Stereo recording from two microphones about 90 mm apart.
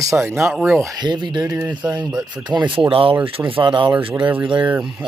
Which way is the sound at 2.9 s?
90° right.